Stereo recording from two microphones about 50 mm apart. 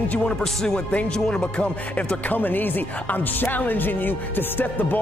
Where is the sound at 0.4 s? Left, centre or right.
Centre.